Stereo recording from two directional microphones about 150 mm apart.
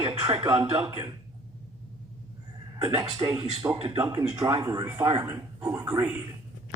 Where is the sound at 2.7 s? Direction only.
25° right (ahead or behind).